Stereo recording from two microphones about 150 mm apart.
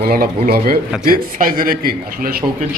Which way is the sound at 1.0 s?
70° right (ahead or behind).